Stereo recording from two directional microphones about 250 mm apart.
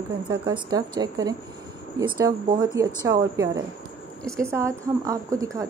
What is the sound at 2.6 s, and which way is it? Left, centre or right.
A woman's voice, centre.